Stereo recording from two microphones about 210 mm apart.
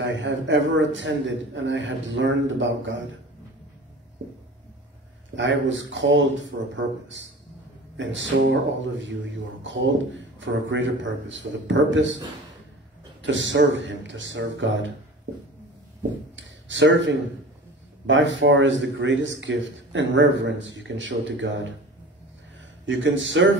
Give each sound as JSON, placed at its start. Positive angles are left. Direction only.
{"t": 0.0, "sound": "a man's voice", "side_deg": -60}
{"t": 5.3, "sound": "a man's voice", "side_deg": -60}
{"t": 13.2, "sound": "a man's voice", "side_deg": -60}
{"t": 16.3, "sound": "a man's voice", "side_deg": -60}
{"t": 22.8, "sound": "a man's voice", "side_deg": -60}